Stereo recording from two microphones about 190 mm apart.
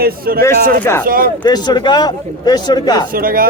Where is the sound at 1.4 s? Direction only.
20° left (ahead or behind).